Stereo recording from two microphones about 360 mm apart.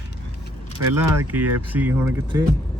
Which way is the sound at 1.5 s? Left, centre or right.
Centre.